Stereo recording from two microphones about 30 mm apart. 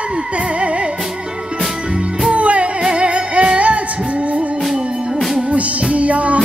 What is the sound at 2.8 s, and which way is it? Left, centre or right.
Music, right.